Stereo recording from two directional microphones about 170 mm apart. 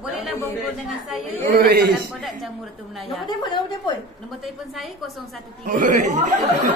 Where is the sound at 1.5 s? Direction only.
70° right (ahead or behind).